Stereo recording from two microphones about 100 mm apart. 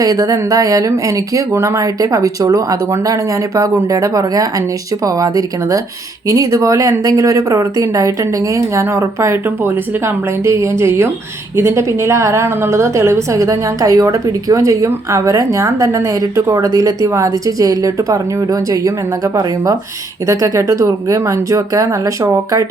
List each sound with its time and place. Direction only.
0.0 s a woman's voice: 35° right (ahead or behind)